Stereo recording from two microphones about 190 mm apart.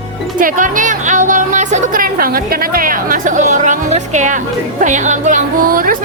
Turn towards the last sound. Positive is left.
turn(degrees=-50)  # may be behind; listen again after turning